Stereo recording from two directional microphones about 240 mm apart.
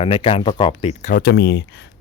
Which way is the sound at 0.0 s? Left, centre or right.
Left.